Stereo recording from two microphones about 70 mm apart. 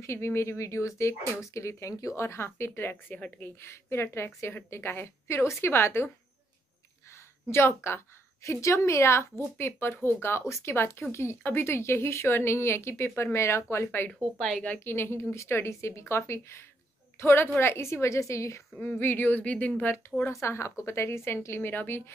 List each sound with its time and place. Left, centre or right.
0.0 s speech: left
3.2 s speech: centre
3.4 s speech: left
7.4 s a woman's voice: left
18.8 s speech: left
19.8 s speech: left